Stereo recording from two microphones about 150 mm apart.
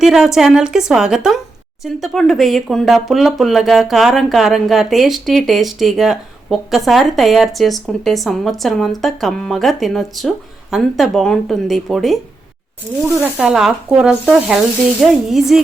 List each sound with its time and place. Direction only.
0.0 s speech: 5° right (ahead or behind)
13.3 s speech: centre (ahead or behind)